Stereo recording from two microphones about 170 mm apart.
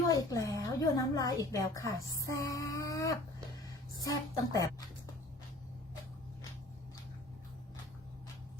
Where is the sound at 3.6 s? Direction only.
20° left (ahead or behind).